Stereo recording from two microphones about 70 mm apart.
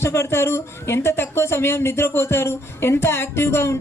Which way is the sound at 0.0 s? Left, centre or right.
Left.